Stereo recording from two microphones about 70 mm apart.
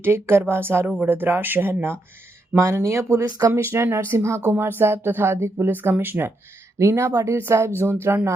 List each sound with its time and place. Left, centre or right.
0.0 s speech: right
2.6 s speech: right
3.2 s speech: right
3.5 s speech: right
6.7 s speech: right